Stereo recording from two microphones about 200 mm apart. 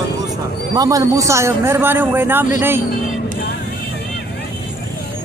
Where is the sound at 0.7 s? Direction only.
20° right (ahead or behind).